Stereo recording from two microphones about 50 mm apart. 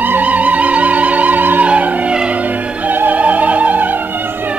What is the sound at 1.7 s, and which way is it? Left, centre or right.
Music, right.